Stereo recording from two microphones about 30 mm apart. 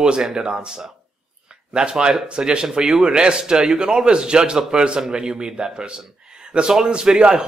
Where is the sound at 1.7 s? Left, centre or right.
Right.